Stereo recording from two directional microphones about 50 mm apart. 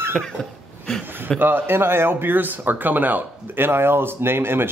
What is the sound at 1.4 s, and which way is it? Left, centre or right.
A man's voice, right.